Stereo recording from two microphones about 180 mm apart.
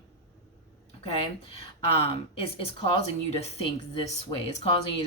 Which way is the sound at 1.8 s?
30° left (ahead or behind).